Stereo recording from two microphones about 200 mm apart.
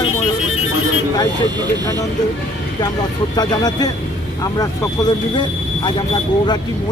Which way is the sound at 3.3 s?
20° left (ahead or behind).